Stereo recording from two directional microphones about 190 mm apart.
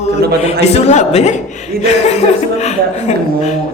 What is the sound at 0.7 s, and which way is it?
Speech, 35° left (ahead or behind).